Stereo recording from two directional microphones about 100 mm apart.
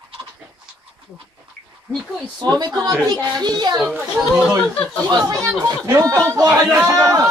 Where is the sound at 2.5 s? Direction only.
40° right (ahead or behind).